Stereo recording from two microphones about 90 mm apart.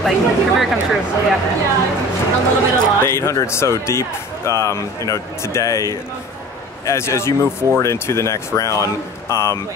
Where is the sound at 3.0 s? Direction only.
30° left (ahead or behind).